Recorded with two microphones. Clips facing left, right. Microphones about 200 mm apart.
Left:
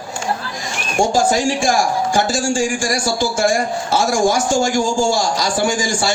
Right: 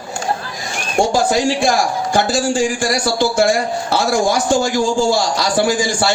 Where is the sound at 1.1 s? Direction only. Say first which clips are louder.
Right 1 dB; 60° right (ahead or behind).